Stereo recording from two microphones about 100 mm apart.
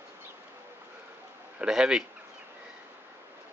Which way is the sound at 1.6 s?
5° right (ahead or behind).